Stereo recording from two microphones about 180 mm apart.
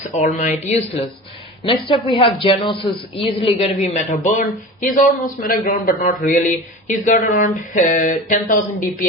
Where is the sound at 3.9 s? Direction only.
45° left (ahead or behind).